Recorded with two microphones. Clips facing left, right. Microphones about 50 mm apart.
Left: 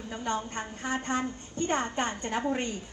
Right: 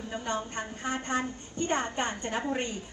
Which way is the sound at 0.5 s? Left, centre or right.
Left.